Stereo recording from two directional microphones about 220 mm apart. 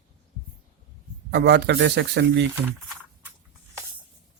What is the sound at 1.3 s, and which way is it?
Speech, 50° right (ahead or behind).